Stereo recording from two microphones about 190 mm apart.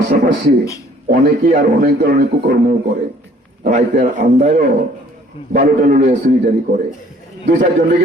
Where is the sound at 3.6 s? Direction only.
45° right (ahead or behind).